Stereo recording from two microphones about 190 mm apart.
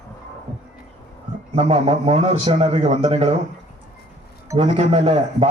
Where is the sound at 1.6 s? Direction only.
30° right (ahead or behind).